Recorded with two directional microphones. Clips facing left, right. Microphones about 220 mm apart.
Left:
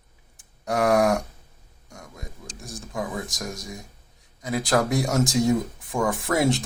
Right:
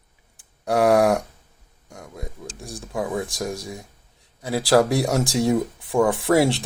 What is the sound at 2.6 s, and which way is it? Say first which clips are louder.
Speech: right 3 dB; 35° right (ahead or behind).